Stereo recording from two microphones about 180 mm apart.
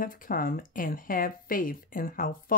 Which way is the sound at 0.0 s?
50° left (ahead or behind).